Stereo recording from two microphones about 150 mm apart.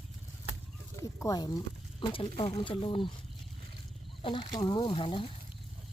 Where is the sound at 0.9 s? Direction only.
20° left (ahead or behind).